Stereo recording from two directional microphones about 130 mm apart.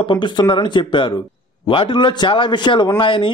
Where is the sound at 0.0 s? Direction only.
40° left (ahead or behind).